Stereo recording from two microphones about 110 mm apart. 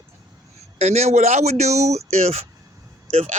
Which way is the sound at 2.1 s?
75° right (ahead or behind).